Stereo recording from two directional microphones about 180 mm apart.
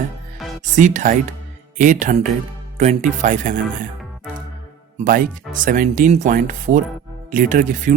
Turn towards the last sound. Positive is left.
turn(degrees=-45)  # may be behind; listen again after turning